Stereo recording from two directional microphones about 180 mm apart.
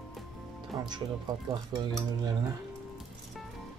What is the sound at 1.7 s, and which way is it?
Speech, 20° right (ahead or behind).